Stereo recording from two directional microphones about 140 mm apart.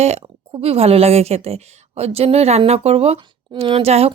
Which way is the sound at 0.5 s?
45° right (ahead or behind).